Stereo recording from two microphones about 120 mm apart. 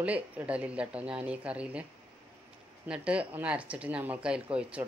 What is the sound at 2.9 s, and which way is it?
A man's voice, 10° right (ahead or behind).